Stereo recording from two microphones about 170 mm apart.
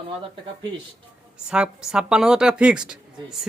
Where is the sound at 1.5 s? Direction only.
5° right (ahead or behind).